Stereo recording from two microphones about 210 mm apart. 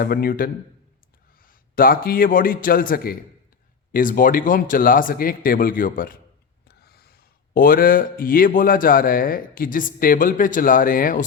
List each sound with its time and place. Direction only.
0.0 s a man's voice: 45° left (ahead or behind)